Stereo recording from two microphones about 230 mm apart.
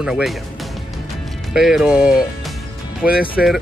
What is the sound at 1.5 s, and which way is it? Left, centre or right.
Speech, centre.